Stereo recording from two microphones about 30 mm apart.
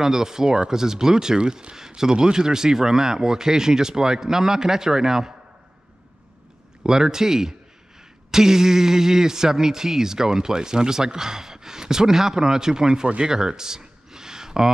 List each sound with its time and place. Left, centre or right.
0.0 s speech: centre
6.8 s speech: right
13.2 s a sound: right